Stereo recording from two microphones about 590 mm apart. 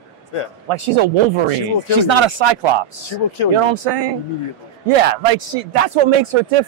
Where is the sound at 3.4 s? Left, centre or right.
Left.